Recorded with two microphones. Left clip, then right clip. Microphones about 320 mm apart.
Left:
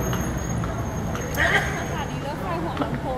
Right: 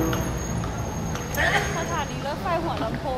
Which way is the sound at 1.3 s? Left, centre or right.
Right.